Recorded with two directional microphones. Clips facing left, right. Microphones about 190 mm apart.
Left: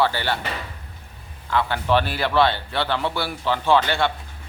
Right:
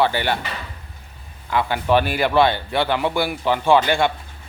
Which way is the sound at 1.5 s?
15° right (ahead or behind).